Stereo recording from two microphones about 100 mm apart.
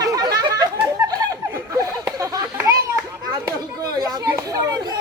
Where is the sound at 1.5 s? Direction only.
30° right (ahead or behind).